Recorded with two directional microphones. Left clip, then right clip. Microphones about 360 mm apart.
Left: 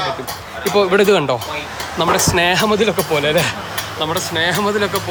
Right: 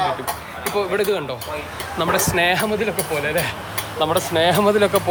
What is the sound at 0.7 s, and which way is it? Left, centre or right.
Speech, left.